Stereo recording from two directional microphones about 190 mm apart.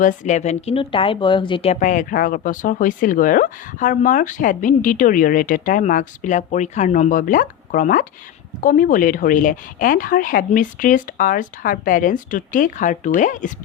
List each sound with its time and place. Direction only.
0.0 s speech: 45° left (ahead or behind)